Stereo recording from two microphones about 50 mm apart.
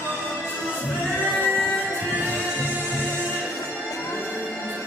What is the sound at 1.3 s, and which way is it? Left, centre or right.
Music, left.